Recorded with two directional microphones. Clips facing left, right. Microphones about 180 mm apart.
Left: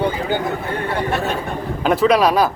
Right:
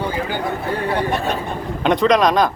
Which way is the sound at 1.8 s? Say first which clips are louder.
Even; 5° left (ahead or behind).